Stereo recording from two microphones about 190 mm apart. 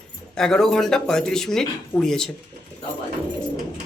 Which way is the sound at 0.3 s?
5° left (ahead or behind).